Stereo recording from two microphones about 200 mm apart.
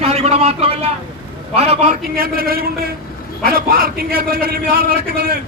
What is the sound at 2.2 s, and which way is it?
A man's voice, 50° right (ahead or behind).